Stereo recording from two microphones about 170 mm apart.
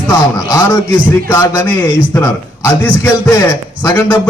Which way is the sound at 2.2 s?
15° left (ahead or behind).